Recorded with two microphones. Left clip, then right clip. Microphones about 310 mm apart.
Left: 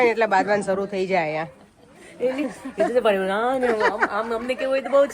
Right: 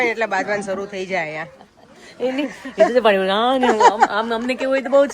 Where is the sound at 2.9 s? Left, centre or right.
Right.